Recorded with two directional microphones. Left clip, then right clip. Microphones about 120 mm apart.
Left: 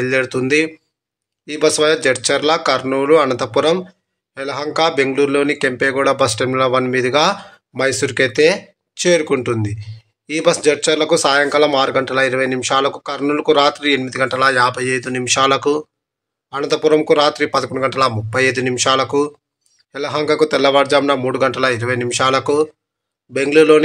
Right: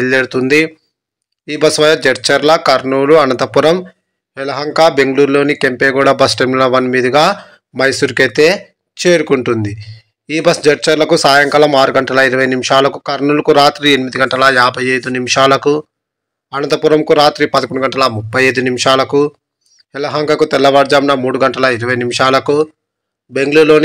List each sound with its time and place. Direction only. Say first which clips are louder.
0.0 s speech: right 5 dB; 25° right (ahead or behind)
3.7 s speech: right 3 dB; 25° right (ahead or behind)
6.8 s speech: right 5 dB; 20° right (ahead or behind)